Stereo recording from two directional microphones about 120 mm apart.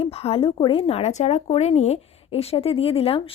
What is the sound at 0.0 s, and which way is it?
A woman's voice, 55° left (ahead or behind).